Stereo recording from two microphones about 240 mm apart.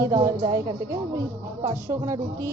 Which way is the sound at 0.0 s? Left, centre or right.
Centre.